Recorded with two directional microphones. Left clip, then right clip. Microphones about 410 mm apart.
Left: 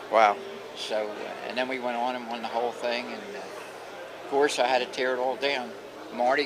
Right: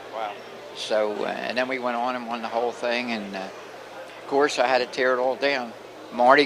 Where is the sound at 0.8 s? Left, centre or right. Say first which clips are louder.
Right 7 dB; right.